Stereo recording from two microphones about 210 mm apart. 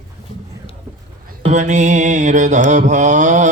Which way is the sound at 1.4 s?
35° right (ahead or behind).